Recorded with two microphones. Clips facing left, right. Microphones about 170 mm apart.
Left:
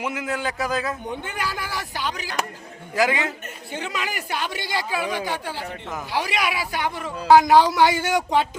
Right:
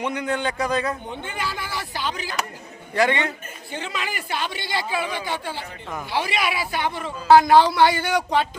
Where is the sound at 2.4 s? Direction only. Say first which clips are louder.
Left 3 dB; 45° left (ahead or behind).